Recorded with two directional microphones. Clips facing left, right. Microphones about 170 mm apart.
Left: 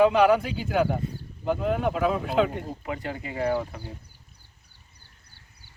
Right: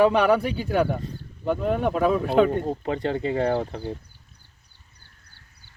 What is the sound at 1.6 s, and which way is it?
Speech, 45° right (ahead or behind).